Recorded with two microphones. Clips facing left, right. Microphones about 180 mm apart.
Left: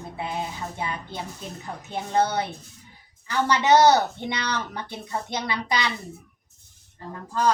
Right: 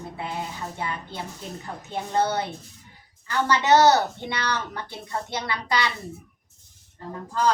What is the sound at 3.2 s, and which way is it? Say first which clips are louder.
Speech: left 1 dB; 15° left (ahead or behind).